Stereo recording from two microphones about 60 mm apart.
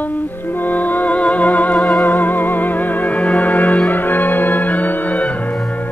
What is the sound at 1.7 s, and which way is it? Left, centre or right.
Music, centre.